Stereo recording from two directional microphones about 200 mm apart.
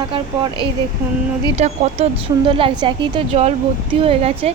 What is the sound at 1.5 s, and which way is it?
A woman's voice, 30° right (ahead or behind).